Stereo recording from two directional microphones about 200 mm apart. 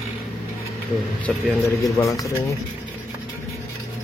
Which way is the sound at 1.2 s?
5° left (ahead or behind).